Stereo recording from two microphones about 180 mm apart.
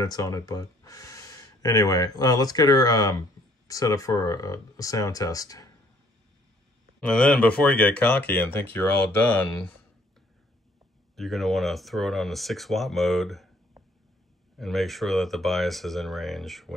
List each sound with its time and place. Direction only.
0.0 s speech: 20° left (ahead or behind)
7.0 s speech: 5° left (ahead or behind)
11.1 s speech: centre (ahead or behind)
14.6 s speech: centre (ahead or behind)